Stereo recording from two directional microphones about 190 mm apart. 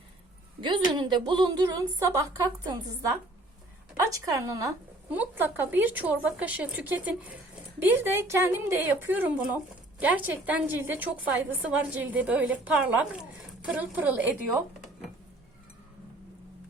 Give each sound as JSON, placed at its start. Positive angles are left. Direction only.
{"t": 0.6, "sound": "a woman's voice", "side_deg": -25}